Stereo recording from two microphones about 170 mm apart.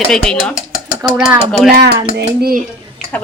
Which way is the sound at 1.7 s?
70° right (ahead or behind).